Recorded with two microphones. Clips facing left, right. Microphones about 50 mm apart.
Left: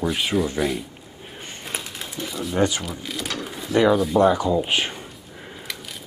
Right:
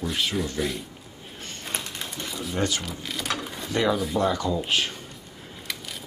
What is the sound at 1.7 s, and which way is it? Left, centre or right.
Typewriter, centre.